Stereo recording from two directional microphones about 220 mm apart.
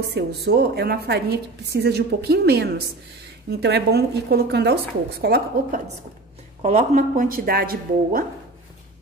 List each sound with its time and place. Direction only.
0.0 s a woman's voice: 45° right (ahead or behind)
6.6 s speech: 30° right (ahead or behind)